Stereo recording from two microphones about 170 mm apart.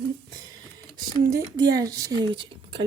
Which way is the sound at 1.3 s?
20° right (ahead or behind).